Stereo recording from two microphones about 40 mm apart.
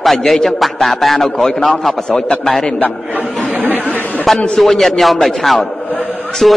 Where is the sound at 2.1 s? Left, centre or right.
Centre.